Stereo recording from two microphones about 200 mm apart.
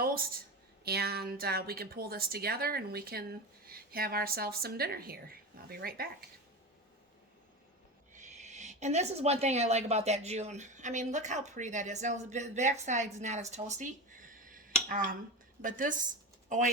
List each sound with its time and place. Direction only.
0.0 s a sound: 45° right (ahead or behind)
0.9 s a woman's voice: 50° right (ahead or behind)
8.1 s a woman's voice: 35° right (ahead or behind)